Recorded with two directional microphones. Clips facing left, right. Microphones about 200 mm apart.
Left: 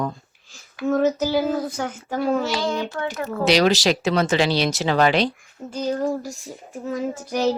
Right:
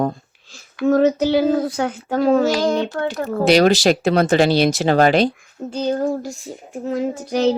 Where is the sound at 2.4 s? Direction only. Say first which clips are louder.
Right 6 dB; 45° right (ahead or behind).